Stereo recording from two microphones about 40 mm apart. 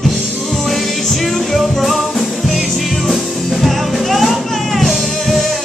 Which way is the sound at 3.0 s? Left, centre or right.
Centre.